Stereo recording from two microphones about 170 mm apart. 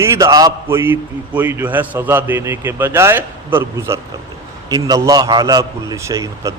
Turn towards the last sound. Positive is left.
turn(degrees=-20)  # may be behind; listen again after turning